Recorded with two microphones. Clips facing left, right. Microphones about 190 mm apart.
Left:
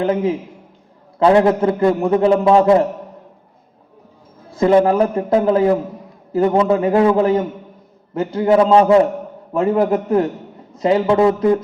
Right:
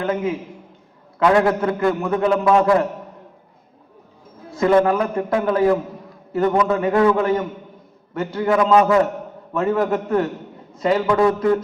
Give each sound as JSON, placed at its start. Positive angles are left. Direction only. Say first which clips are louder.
{"t": 0.0, "sound": "a man's voice", "louder": "left 4 dB", "side_deg": 35}
{"t": 4.9, "sound": "a man's voice", "louder": "left 4 dB", "side_deg": 30}